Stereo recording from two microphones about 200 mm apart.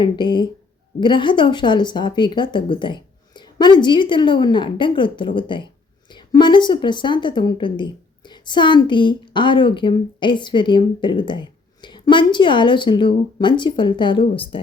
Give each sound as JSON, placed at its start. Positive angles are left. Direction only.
{"t": 0.0, "sound": "a woman's voice", "side_deg": 25}